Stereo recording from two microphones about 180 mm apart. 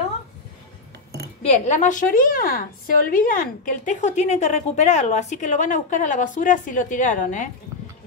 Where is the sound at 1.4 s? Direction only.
40° left (ahead or behind).